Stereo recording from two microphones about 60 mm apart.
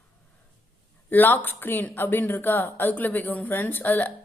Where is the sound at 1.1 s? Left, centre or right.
Left.